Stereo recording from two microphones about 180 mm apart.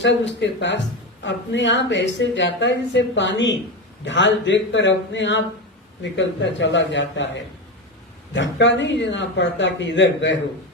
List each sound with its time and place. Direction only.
0.0 s a woman's voice: 80° left
8.3 s a woman's voice: 85° left